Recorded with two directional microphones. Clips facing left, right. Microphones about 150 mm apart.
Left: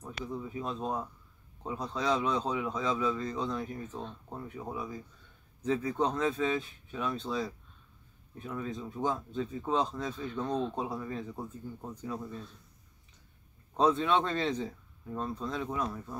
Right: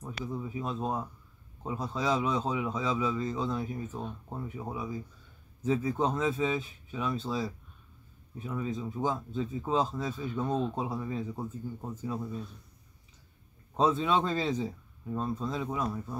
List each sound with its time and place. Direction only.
0.2 s speech: 10° right (ahead or behind)
13.7 s speech: 5° right (ahead or behind)